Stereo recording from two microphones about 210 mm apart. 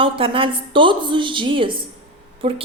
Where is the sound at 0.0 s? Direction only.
25° right (ahead or behind).